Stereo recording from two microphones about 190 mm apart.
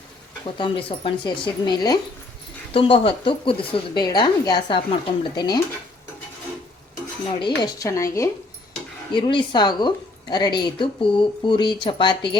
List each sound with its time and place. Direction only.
0.4 s a woman's voice: 30° left (ahead or behind)
7.3 s a woman's voice: 25° left (ahead or behind)